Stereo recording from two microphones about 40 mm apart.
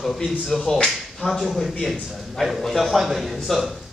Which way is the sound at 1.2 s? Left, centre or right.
Centre.